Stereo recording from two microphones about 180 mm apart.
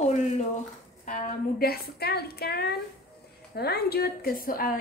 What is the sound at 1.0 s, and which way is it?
A woman's voice, 50° left (ahead or behind).